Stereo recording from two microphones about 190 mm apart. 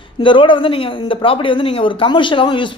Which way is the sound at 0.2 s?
25° left (ahead or behind).